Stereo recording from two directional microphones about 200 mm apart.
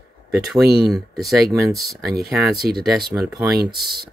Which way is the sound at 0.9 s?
Centre (ahead or behind).